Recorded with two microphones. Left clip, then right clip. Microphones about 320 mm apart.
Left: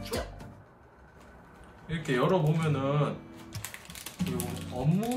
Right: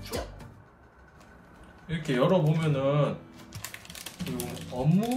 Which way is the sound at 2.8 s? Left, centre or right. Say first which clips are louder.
Right 4 dB; centre.